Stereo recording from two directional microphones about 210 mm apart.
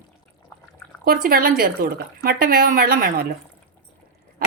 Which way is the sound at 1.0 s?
45° right (ahead or behind).